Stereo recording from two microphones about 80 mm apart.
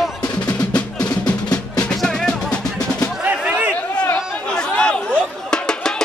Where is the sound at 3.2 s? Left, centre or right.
Right.